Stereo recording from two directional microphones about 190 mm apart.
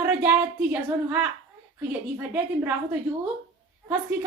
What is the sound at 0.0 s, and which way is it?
A woman's voice, 10° right (ahead or behind).